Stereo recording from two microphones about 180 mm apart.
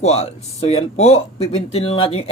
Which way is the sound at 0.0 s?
35° left (ahead or behind).